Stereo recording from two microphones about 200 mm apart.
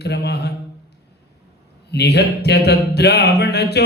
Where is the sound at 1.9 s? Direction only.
55° left (ahead or behind).